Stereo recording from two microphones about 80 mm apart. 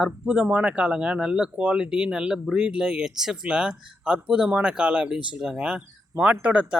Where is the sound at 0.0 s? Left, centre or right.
Centre.